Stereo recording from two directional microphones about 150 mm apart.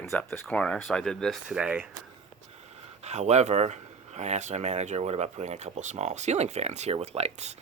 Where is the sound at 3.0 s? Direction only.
50° right (ahead or behind).